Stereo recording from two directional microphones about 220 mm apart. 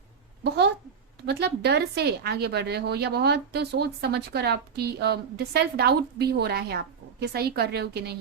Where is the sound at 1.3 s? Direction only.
50° right (ahead or behind).